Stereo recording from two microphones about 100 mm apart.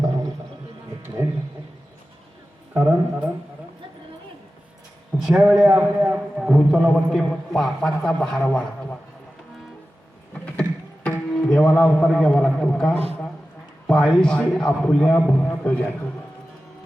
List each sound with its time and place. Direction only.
1.0 s music: 25° right (ahead or behind)
2.7 s speech: 15° right (ahead or behind)
5.2 s a man's voice: 5° right (ahead or behind); by 9.0 s 15° left (ahead or behind)
10.4 s tabla: 10° left (ahead or behind)
11.6 s a man's voice: 10° left (ahead or behind)